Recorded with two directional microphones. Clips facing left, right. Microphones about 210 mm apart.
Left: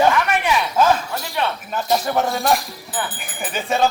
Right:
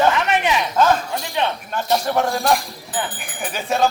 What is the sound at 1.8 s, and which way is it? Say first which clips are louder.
Speech: even; centre (ahead or behind).